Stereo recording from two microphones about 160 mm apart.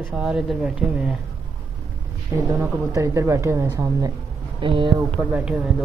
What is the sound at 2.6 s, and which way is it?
Speech, 20° right (ahead or behind).